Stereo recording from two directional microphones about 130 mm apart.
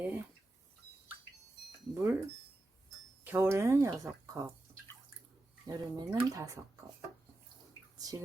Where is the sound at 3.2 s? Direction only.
20° right (ahead or behind).